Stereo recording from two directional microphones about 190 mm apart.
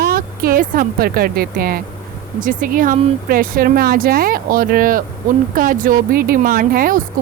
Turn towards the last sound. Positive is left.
turn(degrees=-50)  # may be behind; listen again after turning